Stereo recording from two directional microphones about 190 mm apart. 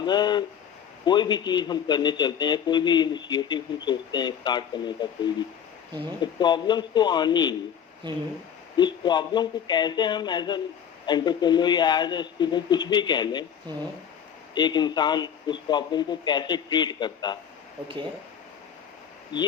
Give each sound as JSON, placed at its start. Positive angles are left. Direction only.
{"t": 0.0, "sound": "a man's voice", "side_deg": 25}
{"t": 6.4, "sound": "a man's voice", "side_deg": 25}
{"t": 8.0, "sound": "speech", "side_deg": -25}
{"t": 8.7, "sound": "a man's voice", "side_deg": 20}
{"t": 14.5, "sound": "a man's voice", "side_deg": 25}